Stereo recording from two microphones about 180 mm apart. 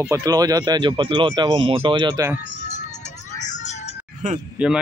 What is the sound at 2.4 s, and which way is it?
Music, 45° left (ahead or behind).